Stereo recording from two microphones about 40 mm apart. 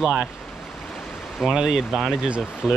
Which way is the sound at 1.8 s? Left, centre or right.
Centre.